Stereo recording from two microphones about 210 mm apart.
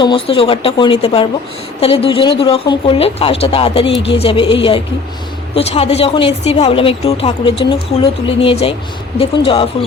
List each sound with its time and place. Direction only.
0.0 s a woman's voice: 25° left (ahead or behind)